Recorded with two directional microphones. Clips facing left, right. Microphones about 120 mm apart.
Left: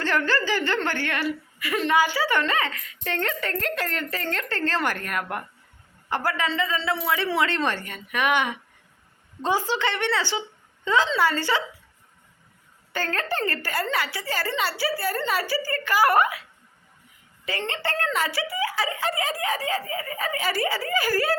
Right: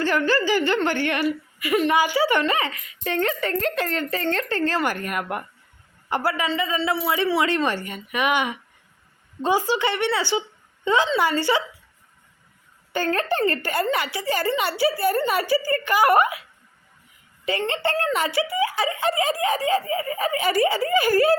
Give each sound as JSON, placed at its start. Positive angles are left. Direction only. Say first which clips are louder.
{"t": 0.0, "sound": "a woman's voice", "louder": "right 3 dB", "side_deg": -10}
{"t": 4.4, "sound": "a woman's voice", "louder": "right 3 dB", "side_deg": -15}
{"t": 12.9, "sound": "speech", "louder": "right 5 dB", "side_deg": -20}
{"t": 17.6, "sound": "speech", "louder": "right 3 dB", "side_deg": -20}